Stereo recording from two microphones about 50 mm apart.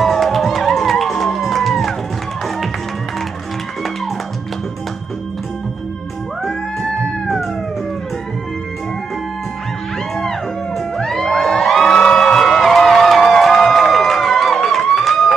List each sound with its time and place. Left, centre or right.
0.0 s music: centre
6.4 s music: centre
11.0 s music: centre